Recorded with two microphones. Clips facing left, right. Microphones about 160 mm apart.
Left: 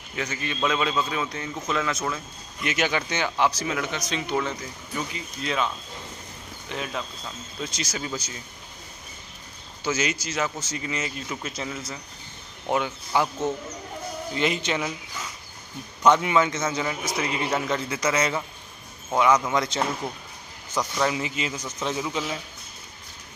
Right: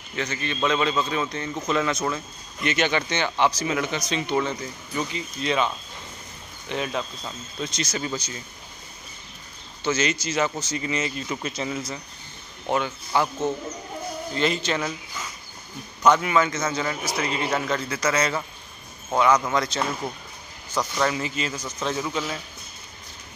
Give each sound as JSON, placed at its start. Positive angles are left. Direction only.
{"t": 0.1, "sound": "a man's voice", "side_deg": 10}
{"t": 6.7, "sound": "speech", "side_deg": 0}
{"t": 9.8, "sound": "speech", "side_deg": 10}
{"t": 12.6, "sound": "a man's voice", "side_deg": 10}
{"t": 14.3, "sound": "a man's voice", "side_deg": 15}
{"t": 16.0, "sound": "a man's voice", "side_deg": 25}
{"t": 21.0, "sound": "a man's voice", "side_deg": 15}